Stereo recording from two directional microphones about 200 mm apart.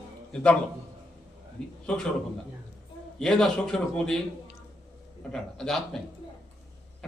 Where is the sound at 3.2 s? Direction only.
5° left (ahead or behind).